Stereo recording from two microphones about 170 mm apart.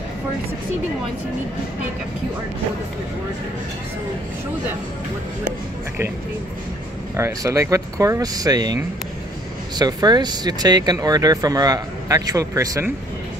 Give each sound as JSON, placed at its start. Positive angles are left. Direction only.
{"t": 7.2, "sound": "speech", "side_deg": -15}